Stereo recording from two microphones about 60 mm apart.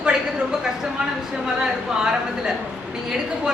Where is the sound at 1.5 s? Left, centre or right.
Centre.